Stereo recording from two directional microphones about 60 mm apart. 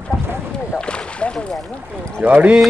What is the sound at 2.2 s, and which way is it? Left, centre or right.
Speech, right.